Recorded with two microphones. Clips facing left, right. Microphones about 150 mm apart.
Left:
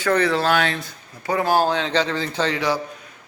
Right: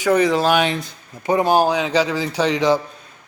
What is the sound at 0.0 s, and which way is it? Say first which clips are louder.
A man's voice: right 3 dB; 15° right (ahead or behind).